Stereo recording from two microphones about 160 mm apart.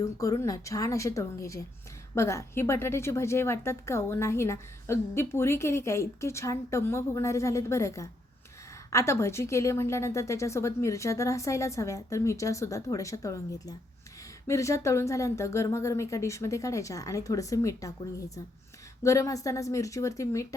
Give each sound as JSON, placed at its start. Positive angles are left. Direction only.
{"t": 0.0, "sound": "a woman's voice", "side_deg": 20}
{"t": 19.0, "sound": "a woman's voice", "side_deg": 20}